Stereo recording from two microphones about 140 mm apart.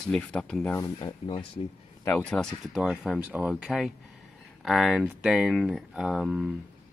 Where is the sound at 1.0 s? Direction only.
35° left (ahead or behind).